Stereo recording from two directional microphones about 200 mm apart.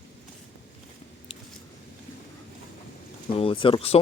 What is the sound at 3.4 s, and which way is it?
Speech, 25° left (ahead or behind).